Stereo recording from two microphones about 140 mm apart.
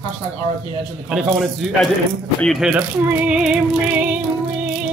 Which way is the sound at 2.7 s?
5° right (ahead or behind).